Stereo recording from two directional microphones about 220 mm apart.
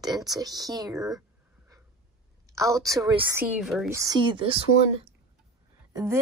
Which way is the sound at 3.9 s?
15° right (ahead or behind).